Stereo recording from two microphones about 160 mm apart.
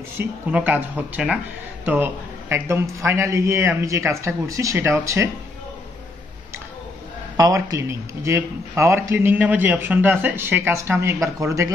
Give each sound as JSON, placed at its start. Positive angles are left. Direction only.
{"t": 0.5, "sound": "a man's voice", "side_deg": -10}
{"t": 7.3, "sound": "a man's voice", "side_deg": -25}